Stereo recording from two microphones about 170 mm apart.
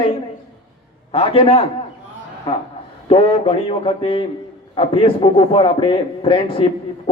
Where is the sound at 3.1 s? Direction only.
35° left (ahead or behind).